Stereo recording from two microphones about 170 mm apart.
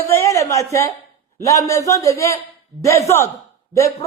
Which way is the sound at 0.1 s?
15° left (ahead or behind).